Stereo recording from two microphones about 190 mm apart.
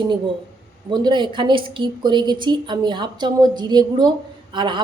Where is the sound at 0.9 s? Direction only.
25° right (ahead or behind).